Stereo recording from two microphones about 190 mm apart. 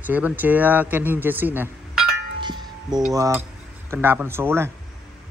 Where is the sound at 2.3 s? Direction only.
25° right (ahead or behind).